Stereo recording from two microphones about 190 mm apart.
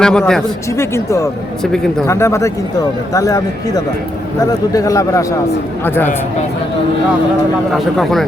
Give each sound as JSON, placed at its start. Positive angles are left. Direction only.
{"t": 0.0, "sound": "speech", "side_deg": 5}
{"t": 0.8, "sound": "speech", "side_deg": 15}
{"t": 7.7, "sound": "speech", "side_deg": 0}